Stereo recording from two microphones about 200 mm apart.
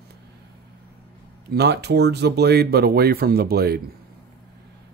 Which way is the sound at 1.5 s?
55° right (ahead or behind).